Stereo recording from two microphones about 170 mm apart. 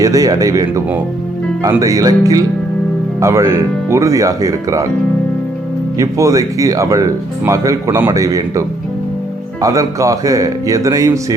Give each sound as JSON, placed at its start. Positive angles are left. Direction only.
{"t": 0.0, "sound": "speech", "side_deg": -20}
{"t": 6.0, "sound": "speech", "side_deg": -20}